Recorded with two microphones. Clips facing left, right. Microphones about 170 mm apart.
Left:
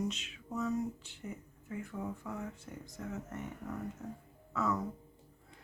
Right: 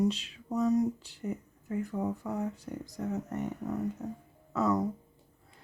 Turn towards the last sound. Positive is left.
turn(degrees=-35)  # may be behind; listen again after turning